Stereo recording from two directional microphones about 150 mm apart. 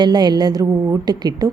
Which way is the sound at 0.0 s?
30° right (ahead or behind).